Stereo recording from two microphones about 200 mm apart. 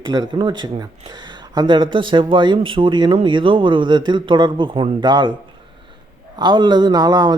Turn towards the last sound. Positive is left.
turn(degrees=-20)  # may be behind; listen again after turning